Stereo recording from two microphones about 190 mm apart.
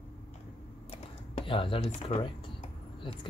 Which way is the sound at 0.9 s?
30° left (ahead or behind).